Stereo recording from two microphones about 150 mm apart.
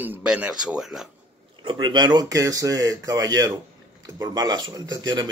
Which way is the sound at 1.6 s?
30° right (ahead or behind).